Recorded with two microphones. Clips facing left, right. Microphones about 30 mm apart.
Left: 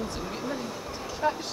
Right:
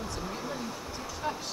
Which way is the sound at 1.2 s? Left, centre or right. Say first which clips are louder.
Left 7 dB; centre.